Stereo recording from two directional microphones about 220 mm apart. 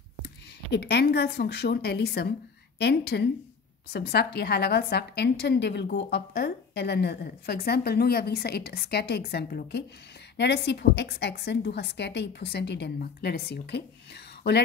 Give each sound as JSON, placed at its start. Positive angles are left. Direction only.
{"t": 0.7, "sound": "a woman's voice", "side_deg": 50}